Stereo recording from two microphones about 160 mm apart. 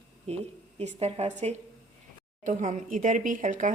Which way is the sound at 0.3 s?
45° right (ahead or behind).